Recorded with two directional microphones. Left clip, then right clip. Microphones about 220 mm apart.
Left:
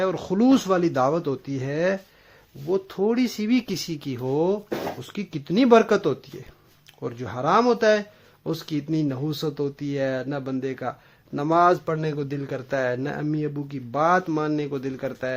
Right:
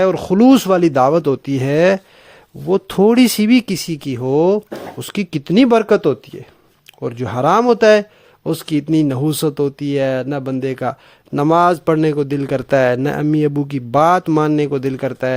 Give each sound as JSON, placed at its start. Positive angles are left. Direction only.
{"t": 0.0, "sound": "a man's voice", "side_deg": -40}